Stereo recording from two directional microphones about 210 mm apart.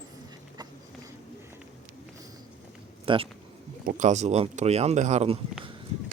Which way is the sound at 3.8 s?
35° right (ahead or behind).